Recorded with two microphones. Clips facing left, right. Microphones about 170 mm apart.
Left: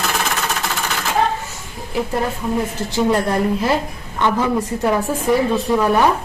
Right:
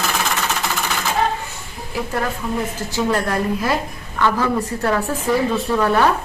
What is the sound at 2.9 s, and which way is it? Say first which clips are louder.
A woman's voice: left 3 dB; 20° left (ahead or behind).